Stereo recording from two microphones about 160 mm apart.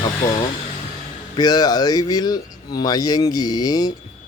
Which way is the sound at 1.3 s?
25° left (ahead or behind).